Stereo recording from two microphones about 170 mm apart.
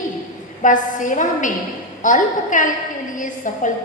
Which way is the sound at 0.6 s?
50° left (ahead or behind).